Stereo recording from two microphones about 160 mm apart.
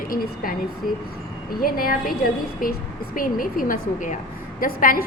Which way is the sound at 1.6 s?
65° left (ahead or behind).